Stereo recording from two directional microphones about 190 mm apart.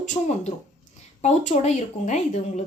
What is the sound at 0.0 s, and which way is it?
Speech, 40° left (ahead or behind).